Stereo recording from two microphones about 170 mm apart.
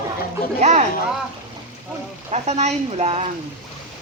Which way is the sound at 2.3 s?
40° right (ahead or behind).